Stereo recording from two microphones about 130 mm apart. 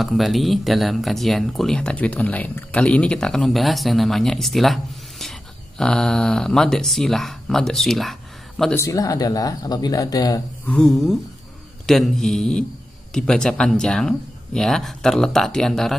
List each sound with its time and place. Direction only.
0.0 s speech: centre (ahead or behind)
5.8 s speech: 5° left (ahead or behind)
8.7 s speech: 25° left (ahead or behind)
10.7 s speech: 5° left (ahead or behind)